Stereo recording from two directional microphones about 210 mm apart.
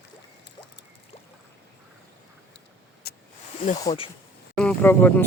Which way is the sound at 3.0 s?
50° left (ahead or behind).